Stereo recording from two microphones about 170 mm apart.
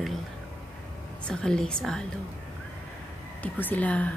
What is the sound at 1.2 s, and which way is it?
Speech, 5° left (ahead or behind).